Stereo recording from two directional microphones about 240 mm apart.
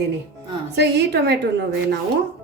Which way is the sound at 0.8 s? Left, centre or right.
Right.